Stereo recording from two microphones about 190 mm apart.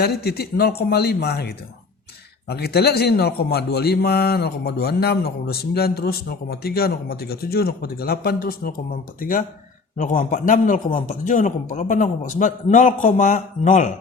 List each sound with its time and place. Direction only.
0.0 s a man's voice: 55° left (ahead or behind)
10.3 s a man's voice: 45° left (ahead or behind)